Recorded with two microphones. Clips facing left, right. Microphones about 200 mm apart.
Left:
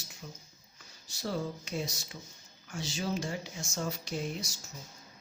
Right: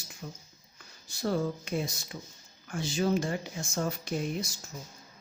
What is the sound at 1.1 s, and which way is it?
Speech, 55° right (ahead or behind).